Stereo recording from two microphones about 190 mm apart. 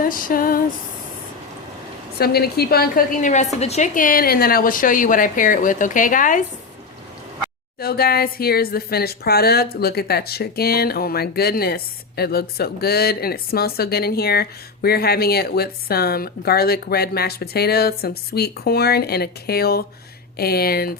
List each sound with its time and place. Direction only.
0.0 s a woman's voice: 45° left (ahead or behind)
2.1 s a woman's voice: 55° left (ahead or behind)
7.8 s speech: 50° left (ahead or behind)